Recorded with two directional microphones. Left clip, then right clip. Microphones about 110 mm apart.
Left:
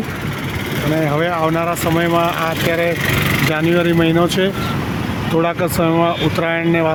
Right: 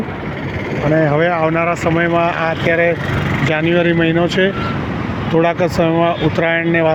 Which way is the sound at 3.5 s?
25° left (ahead or behind).